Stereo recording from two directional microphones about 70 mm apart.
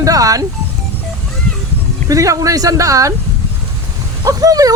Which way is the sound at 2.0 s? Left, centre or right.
Right.